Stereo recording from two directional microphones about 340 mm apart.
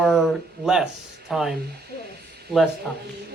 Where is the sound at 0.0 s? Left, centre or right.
Centre.